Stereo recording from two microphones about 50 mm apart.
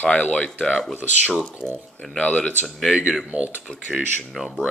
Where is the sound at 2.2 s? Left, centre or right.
Left.